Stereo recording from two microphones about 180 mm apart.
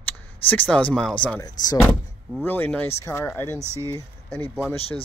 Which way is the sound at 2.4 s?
10° left (ahead or behind).